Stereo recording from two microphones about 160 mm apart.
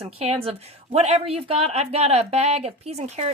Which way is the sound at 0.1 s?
40° right (ahead or behind).